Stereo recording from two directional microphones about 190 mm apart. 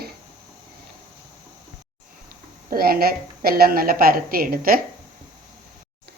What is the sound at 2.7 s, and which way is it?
A woman's voice, 50° right (ahead or behind).